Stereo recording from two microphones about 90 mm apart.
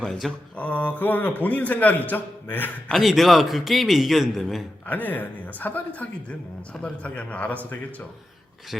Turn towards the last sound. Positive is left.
turn(degrees=15)  # may be behind; listen again after turning